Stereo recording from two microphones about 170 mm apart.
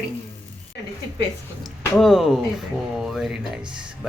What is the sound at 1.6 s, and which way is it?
Speech, centre (ahead or behind).